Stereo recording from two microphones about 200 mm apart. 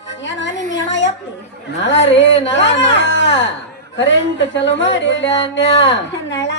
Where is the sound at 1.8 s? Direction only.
65° left (ahead or behind).